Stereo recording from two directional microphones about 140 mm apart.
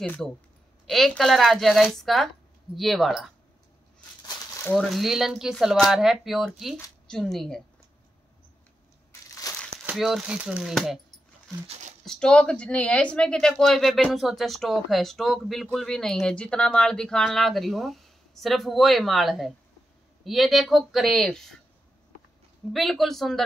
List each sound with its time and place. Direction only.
0.0 s speech: 10° left (ahead or behind)
4.7 s speech: centre (ahead or behind)
9.3 s crumpling: 25° left (ahead or behind)
9.8 s speech: 5° right (ahead or behind)
11.6 s speech: 50° right (ahead or behind)
12.0 s speech: 5° left (ahead or behind)
22.7 s speech: centre (ahead or behind)